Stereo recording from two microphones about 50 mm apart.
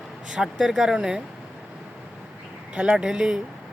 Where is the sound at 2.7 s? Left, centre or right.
Right.